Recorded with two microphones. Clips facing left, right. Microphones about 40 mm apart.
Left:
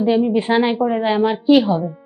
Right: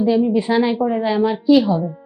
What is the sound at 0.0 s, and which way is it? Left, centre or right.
A woman's voice, left.